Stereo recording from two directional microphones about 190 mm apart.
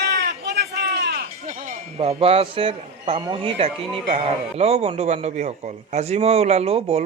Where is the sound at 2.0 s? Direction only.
30° right (ahead or behind).